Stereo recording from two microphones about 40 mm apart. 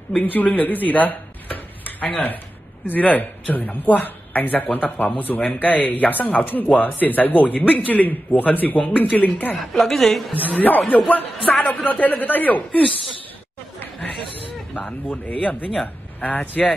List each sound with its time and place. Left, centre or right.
0.2 s speech: left
9.8 s a woman's voice: centre
10.3 s speech: left
15.0 s speech: left